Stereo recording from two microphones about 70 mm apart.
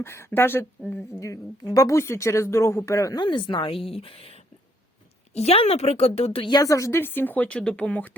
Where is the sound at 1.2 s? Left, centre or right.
Left.